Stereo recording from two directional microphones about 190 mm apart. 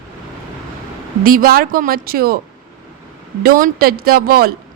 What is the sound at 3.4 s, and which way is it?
A woman's voice, 50° right (ahead or behind).